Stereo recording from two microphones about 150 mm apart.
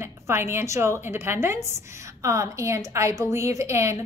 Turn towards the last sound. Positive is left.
turn(degrees=-20)  # may be behind; listen again after turning